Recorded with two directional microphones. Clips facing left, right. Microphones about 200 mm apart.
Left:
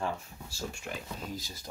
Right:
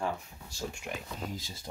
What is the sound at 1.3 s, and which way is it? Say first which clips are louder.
Speech: left 1 dB; 25° right (ahead or behind).